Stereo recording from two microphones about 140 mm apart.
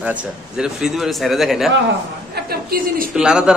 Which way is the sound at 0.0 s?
10° right (ahead or behind).